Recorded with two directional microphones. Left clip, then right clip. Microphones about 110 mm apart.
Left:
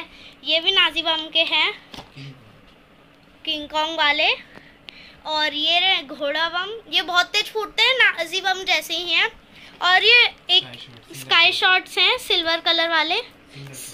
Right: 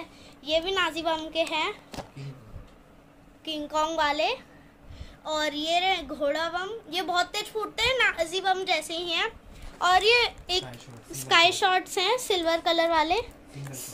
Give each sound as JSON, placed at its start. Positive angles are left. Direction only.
{"t": 0.2, "sound": "a woman's voice", "side_deg": -15}
{"t": 3.4, "sound": "a woman's voice", "side_deg": -5}
{"t": 8.7, "sound": "a woman's voice", "side_deg": 5}
{"t": 9.8, "sound": "a woman's voice", "side_deg": -5}
{"t": 10.4, "sound": "a woman's voice", "side_deg": -20}